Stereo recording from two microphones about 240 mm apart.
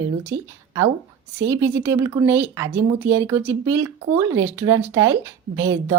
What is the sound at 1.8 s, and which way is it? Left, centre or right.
A woman's voice, centre.